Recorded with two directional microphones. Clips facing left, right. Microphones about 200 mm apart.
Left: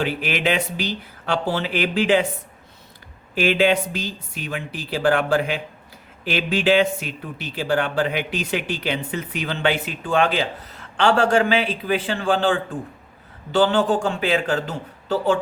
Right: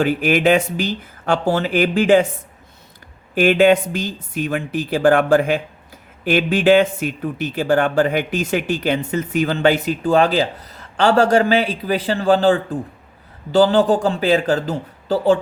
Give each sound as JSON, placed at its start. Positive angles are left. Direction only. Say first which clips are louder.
{"t": 0.0, "sound": "speech", "louder": "right 7 dB", "side_deg": -45}
{"t": 3.3, "sound": "a man's voice", "louder": "right 5 dB", "side_deg": -50}